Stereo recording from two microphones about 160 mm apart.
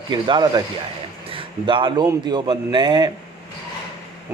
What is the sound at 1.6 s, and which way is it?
Speech, 30° right (ahead or behind).